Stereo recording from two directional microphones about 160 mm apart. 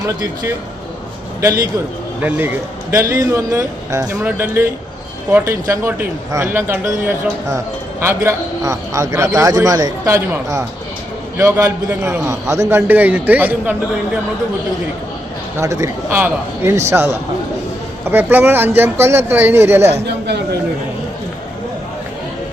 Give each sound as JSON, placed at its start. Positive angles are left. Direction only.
{"t": 2.2, "sound": "a man's voice", "side_deg": -15}
{"t": 15.5, "sound": "a man's voice", "side_deg": -20}
{"t": 19.9, "sound": "a man's voice", "side_deg": -90}